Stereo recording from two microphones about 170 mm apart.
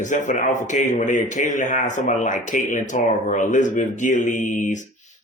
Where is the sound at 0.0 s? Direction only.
45° left (ahead or behind).